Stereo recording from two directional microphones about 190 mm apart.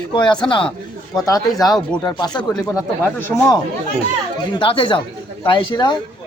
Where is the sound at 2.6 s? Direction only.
Centre (ahead or behind).